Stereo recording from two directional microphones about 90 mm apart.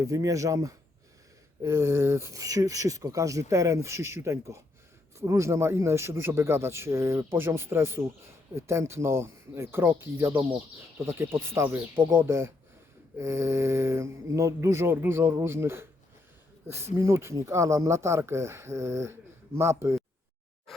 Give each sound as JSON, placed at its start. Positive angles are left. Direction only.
{"t": 0.0, "sound": "speech", "side_deg": -40}